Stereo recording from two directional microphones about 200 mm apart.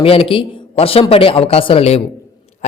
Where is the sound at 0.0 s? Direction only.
30° left (ahead or behind).